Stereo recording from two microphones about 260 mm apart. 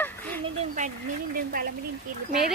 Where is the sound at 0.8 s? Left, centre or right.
Right.